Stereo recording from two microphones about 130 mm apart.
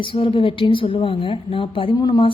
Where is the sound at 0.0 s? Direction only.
40° left (ahead or behind).